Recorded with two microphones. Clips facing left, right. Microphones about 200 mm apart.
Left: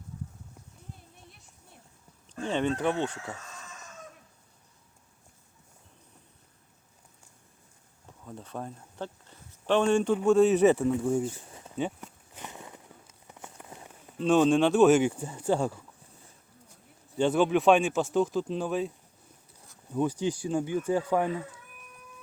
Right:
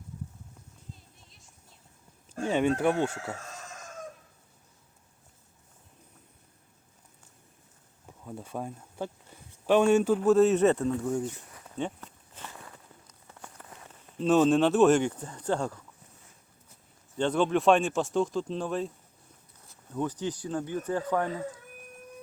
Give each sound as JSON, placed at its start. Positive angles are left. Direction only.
{"t": 1.1, "sound": "music", "side_deg": 60}
{"t": 2.5, "sound": "speech", "side_deg": -10}
{"t": 3.3, "sound": "chicken", "side_deg": -45}
{"t": 8.2, "sound": "speech", "side_deg": -10}
{"t": 11.2, "sound": "a sound", "side_deg": 30}
{"t": 11.8, "sound": "walk", "side_deg": 10}
{"t": 14.2, "sound": "speech", "side_deg": 0}
{"t": 17.2, "sound": "speech", "side_deg": 10}
{"t": 19.9, "sound": "speech", "side_deg": 10}